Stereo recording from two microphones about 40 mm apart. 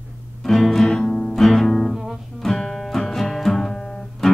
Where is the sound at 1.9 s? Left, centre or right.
Centre.